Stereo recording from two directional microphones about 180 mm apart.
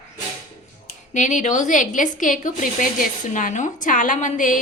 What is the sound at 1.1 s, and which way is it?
A woman's voice, 45° left (ahead or behind).